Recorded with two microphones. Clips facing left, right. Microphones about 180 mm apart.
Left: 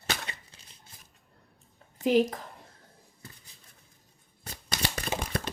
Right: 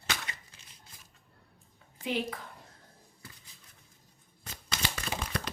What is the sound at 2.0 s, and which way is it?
Speech, 40° left (ahead or behind).